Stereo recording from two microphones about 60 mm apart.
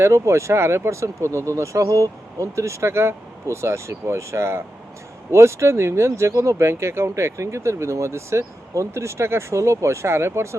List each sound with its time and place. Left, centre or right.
0.0 s speech: right